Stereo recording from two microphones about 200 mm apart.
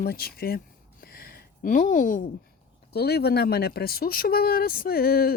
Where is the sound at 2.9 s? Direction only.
55° left (ahead or behind).